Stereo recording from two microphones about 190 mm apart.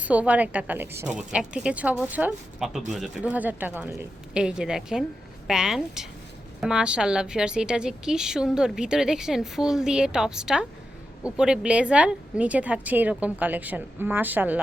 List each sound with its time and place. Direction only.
0.0 s a woman's voice: 5° right (ahead or behind)